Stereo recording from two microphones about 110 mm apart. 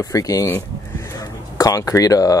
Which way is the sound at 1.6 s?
30° left (ahead or behind).